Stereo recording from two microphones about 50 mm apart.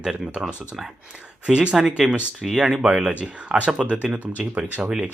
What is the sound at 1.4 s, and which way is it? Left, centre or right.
Speech, right.